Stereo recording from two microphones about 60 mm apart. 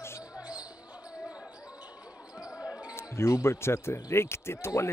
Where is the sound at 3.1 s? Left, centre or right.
Left.